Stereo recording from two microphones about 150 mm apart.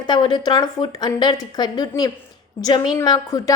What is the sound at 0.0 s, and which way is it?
A woman's voice, 30° left (ahead or behind).